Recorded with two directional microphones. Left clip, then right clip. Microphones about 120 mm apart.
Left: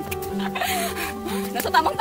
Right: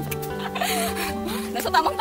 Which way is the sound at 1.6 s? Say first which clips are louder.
Left 1 dB; 35° left (ahead or behind).